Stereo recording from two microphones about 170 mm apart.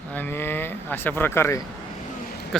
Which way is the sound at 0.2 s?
15° left (ahead or behind).